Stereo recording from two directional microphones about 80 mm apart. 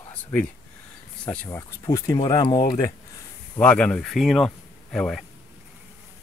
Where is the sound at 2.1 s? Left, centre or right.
Left.